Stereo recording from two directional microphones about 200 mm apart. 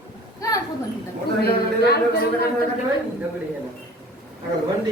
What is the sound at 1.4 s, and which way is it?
Speech, 55° left (ahead or behind).